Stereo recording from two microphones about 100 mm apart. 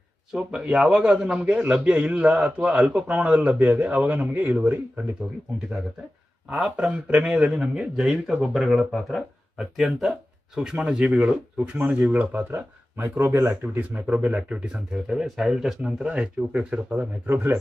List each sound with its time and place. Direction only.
0.3 s speech: 10° right (ahead or behind)
6.5 s speech: 10° right (ahead or behind)